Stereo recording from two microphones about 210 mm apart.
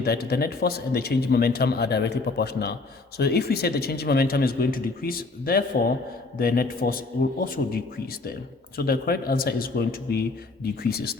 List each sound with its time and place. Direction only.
0.0 s a man's voice: 50° left (ahead or behind)
8.8 s a man's voice: 45° left (ahead or behind)